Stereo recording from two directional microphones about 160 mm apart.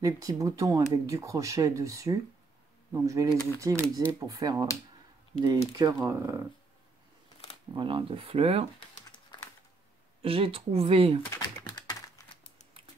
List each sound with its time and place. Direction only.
0.0 s speech: 20° right (ahead or behind)
5.8 s speech: 20° right (ahead or behind)
7.7 s speech: 30° right (ahead or behind)
10.2 s speech: 35° right (ahead or behind)
11.2 s typing: 25° left (ahead or behind)